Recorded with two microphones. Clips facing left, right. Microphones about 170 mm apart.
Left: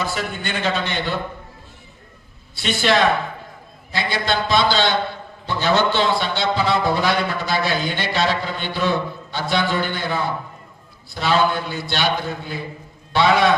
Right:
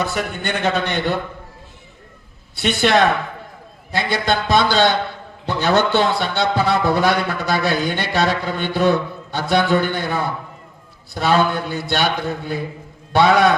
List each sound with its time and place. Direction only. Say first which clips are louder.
0.0 s a man's voice: right 3 dB; 60° right (ahead or behind)
2.6 s a man's voice: right 3 dB; 55° right (ahead or behind)